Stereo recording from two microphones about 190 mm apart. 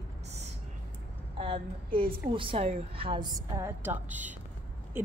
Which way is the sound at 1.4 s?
30° right (ahead or behind).